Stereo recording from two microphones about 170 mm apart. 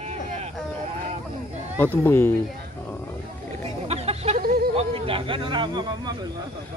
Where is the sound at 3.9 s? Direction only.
35° right (ahead or behind).